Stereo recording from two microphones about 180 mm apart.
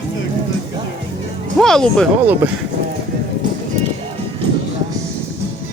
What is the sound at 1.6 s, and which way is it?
Speech, centre (ahead or behind).